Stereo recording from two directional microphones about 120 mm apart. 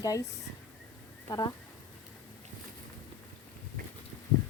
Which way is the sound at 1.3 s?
30° left (ahead or behind).